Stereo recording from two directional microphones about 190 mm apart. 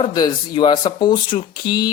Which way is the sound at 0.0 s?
25° left (ahead or behind).